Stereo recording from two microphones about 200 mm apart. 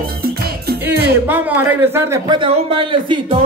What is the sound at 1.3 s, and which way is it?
Speech, 10° right (ahead or behind).